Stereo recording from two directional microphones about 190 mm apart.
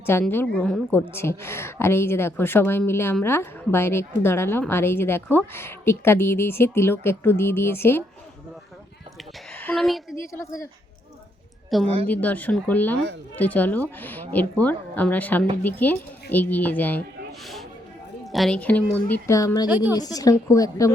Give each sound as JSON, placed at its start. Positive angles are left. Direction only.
{"t": 0.0, "sound": "a woman's voice", "side_deg": 10}
{"t": 9.5, "sound": "a sound", "side_deg": 10}
{"t": 10.3, "sound": "a woman's voice", "side_deg": 15}
{"t": 11.7, "sound": "a woman's voice", "side_deg": 0}
{"t": 17.4, "sound": "a sound", "side_deg": 0}
{"t": 18.3, "sound": "a woman's voice", "side_deg": 0}
{"t": 19.6, "sound": "a woman's voice", "side_deg": -10}
{"t": 20.0, "sound": "a woman's voice", "side_deg": 20}